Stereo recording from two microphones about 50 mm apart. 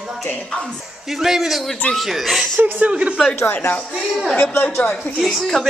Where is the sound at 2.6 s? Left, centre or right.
Right.